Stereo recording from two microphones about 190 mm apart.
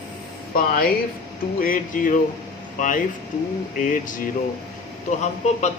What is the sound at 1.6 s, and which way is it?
Speech, 45° left (ahead or behind).